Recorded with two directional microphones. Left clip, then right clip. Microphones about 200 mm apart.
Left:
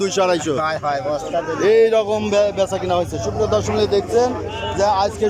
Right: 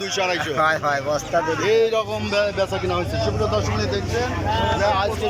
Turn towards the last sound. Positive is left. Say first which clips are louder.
# left 4 dB
turn(degrees=25)  # may be behind; listen again after turning